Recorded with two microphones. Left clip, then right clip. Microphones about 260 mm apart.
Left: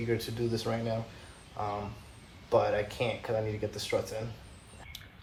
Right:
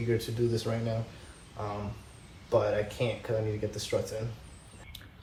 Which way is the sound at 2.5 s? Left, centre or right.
Left.